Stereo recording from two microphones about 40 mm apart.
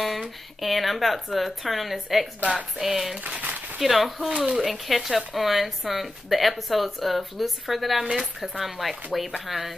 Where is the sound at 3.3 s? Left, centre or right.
Right.